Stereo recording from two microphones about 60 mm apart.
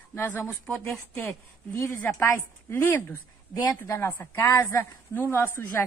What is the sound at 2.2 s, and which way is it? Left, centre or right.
A woman's voice, left.